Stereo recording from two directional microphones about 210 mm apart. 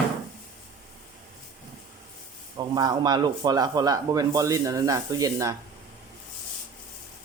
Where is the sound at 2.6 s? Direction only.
20° right (ahead or behind).